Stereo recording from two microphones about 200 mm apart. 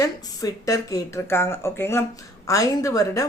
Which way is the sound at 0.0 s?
15° left (ahead or behind).